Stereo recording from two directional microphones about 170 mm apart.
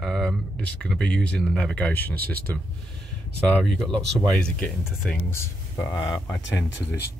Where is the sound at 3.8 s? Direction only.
5° left (ahead or behind).